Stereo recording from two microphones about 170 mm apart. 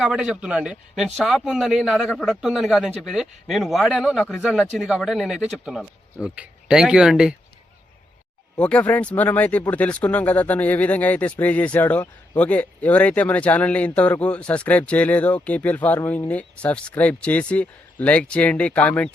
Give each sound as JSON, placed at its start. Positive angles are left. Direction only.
{"t": 0.0, "sound": "a man's voice", "side_deg": -5}
{"t": 8.5, "sound": "speech", "side_deg": 5}